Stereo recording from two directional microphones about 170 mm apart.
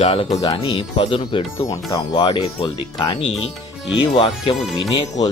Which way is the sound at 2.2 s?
30° left (ahead or behind).